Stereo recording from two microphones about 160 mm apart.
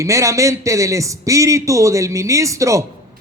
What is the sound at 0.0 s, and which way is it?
Speech, 20° right (ahead or behind).